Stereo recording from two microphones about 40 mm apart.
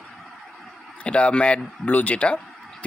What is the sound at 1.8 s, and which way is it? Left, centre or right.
Speech, left.